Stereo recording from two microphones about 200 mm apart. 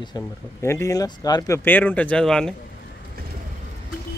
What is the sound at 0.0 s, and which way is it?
Speech, 15° left (ahead or behind).